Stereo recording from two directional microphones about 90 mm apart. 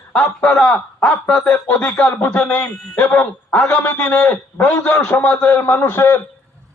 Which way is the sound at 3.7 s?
25° left (ahead or behind).